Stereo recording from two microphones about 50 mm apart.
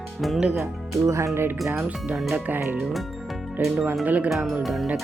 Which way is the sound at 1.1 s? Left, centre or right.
Right.